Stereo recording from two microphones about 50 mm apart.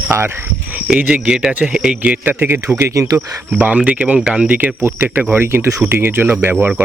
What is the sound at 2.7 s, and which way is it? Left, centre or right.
Speech, right.